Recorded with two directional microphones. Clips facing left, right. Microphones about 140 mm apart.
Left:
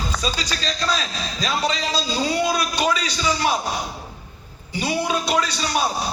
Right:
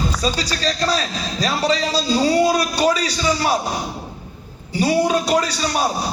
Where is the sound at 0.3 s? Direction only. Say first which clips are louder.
Right 5 dB; 40° right (ahead or behind).